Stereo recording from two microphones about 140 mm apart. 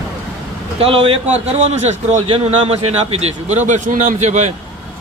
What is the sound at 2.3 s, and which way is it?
Speech, 40° right (ahead or behind).